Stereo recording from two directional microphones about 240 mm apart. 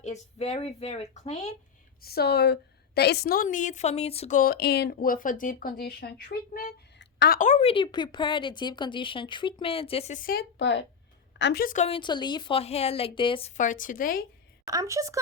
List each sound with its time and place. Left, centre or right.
0.0 s a woman's voice: left
2.0 s a woman's voice: left
14.7 s a woman's voice: centre